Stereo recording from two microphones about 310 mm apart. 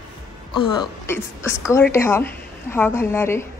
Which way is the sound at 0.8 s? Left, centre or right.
Centre.